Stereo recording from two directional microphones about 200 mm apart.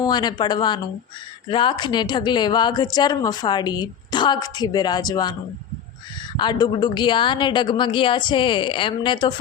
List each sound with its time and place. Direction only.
0.0 s a woman's voice: 20° left (ahead or behind)